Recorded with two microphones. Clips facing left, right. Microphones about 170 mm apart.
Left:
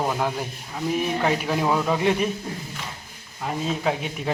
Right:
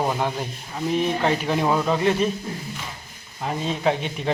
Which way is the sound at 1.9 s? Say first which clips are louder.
Right 1 dB; 15° left (ahead or behind).